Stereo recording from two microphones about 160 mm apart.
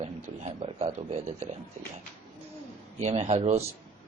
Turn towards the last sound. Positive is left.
turn(degrees=-45)  # may be behind; listen again after turning